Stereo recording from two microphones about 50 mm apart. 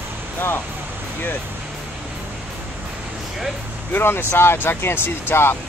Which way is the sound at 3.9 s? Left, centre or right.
Left.